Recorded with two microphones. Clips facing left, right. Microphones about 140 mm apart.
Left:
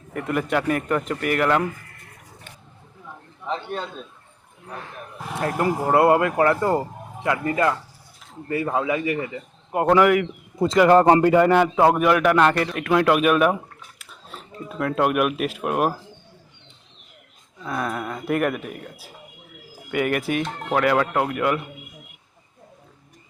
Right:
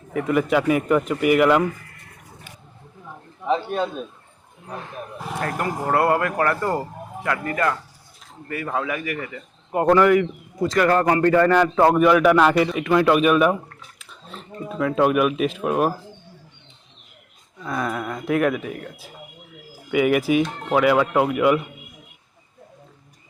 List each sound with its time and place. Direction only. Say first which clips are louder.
0.1 s a man's voice: right 4 dB; centre (ahead or behind)
3.5 s a sound: right 6 dB; 10° right (ahead or behind)
5.4 s speech: left 3 dB; 20° left (ahead or behind)
9.7 s a man's voice: right 1 dB; 10° left (ahead or behind)
10.6 s speech: left 4 dB; 25° left (ahead or behind)
11.2 s a man's voice: even; 15° left (ahead or behind)
17.6 s a man's voice: right 1 dB; centre (ahead or behind)